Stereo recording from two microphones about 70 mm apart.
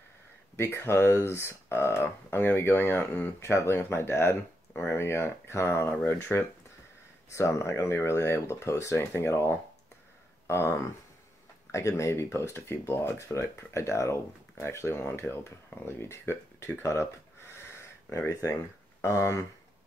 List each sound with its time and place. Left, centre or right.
0.6 s speech: left
3.3 s speech: left
7.3 s speech: left
11.9 s speech: left
18.1 s speech: left